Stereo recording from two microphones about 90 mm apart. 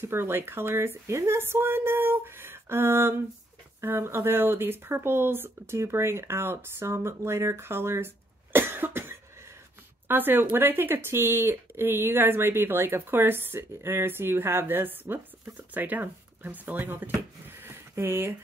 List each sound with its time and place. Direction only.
0.0 s speech: 25° right (ahead or behind)
8.5 s cough: 25° right (ahead or behind)
10.0 s speech: 20° right (ahead or behind)
17.6 s a sound: 25° right (ahead or behind)